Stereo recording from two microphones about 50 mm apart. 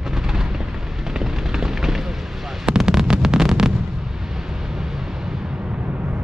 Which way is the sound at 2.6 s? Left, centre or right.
Centre.